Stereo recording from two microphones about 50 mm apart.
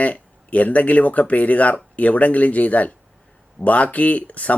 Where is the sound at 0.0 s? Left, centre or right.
Left.